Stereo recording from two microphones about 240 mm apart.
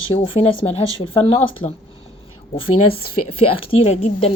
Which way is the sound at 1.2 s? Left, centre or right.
Left.